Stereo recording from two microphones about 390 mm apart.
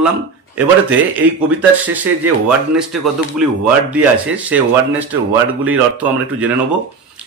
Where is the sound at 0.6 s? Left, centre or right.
Centre.